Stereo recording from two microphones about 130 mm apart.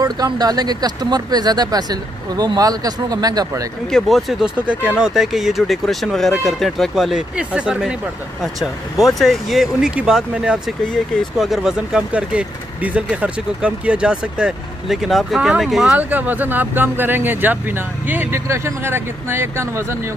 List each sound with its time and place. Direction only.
0.0 s speech: 30° right (ahead or behind)
3.9 s speech: centre (ahead or behind)
9.2 s speech: centre (ahead or behind)
16.0 s speech: 15° right (ahead or behind)